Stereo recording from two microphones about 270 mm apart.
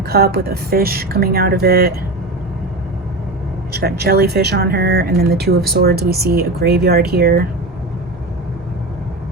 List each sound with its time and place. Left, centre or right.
0.0 s speech: right
3.7 s speech: right